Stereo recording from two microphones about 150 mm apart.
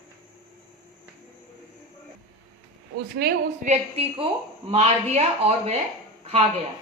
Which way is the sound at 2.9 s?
90° right.